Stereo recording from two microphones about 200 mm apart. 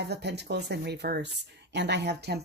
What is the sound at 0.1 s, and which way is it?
Speech, 55° right (ahead or behind).